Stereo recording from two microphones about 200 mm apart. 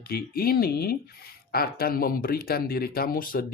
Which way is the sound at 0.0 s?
50° left (ahead or behind).